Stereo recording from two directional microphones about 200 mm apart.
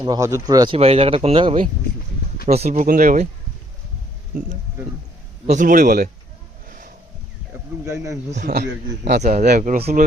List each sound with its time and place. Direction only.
0.0 s speech: 15° right (ahead or behind); by 3.2 s 40° right (ahead or behind)
5.5 s speech: 40° right (ahead or behind)
6.7 s wild animals: 45° right (ahead or behind)
7.9 s speech: 15° right (ahead or behind)
8.4 s a man's voice: 55° right (ahead or behind)
9.2 s speech: 35° right (ahead or behind)